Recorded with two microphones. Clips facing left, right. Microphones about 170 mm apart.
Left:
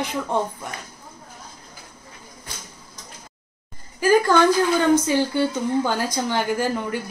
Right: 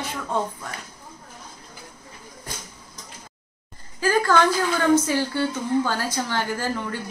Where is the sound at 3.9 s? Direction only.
15° left (ahead or behind).